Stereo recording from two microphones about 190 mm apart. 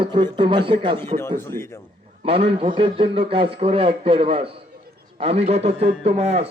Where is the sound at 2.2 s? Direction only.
30° right (ahead or behind).